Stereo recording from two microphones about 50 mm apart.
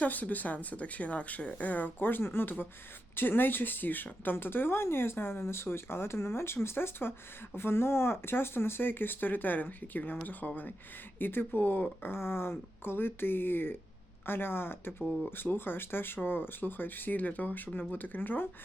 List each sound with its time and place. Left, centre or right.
0.0 s speech: left